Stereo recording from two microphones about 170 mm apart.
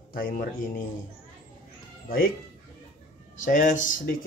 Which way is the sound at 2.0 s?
55° left (ahead or behind).